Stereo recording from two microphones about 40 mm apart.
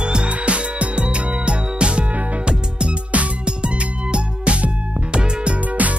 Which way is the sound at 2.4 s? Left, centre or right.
Right.